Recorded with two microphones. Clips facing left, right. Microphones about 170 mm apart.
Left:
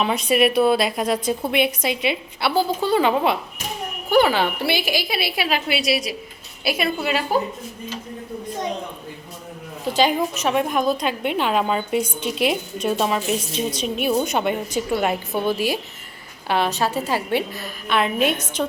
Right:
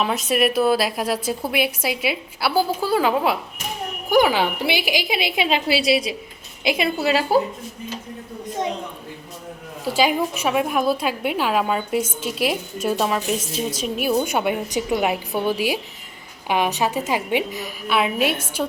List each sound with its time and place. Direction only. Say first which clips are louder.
0.0 s a woman's voice: left 2 dB; centre (ahead or behind); by 6.9 s 25° right (ahead or behind)
7.0 s a woman's voice: right 3 dB; 35° right (ahead or behind)
9.8 s a woman's voice: even; 5° right (ahead or behind)